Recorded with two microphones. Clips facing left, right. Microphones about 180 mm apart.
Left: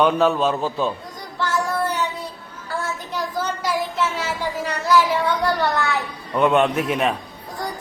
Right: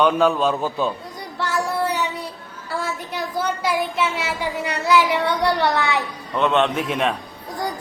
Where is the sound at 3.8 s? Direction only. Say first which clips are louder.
Right 1 dB; 65° right (ahead or behind).